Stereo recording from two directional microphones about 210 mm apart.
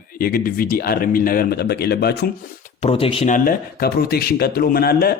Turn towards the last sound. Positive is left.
turn(degrees=45)  # may be behind; listen again after turning